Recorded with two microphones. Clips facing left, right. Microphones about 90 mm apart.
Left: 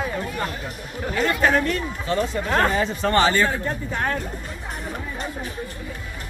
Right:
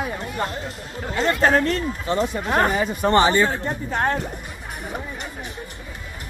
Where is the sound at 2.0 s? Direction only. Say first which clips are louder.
Left 1 dB; 20° right (ahead or behind).